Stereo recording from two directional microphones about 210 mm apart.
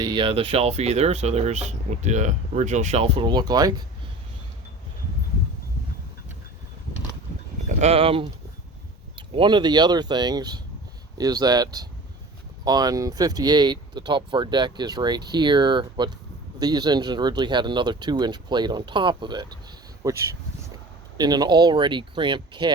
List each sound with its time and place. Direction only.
0.0 s speech: 20° right (ahead or behind)
7.7 s speech: 30° right (ahead or behind)